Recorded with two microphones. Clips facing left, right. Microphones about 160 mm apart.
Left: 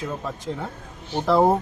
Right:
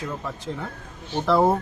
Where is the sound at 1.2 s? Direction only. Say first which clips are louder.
Left 1 dB; 20° left (ahead or behind).